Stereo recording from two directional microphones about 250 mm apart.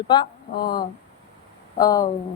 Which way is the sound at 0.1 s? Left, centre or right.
Centre.